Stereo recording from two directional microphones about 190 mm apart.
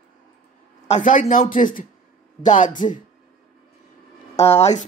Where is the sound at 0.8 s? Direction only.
40° left (ahead or behind).